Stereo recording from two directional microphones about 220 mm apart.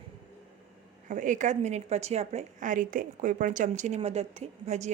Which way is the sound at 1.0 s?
35° right (ahead or behind).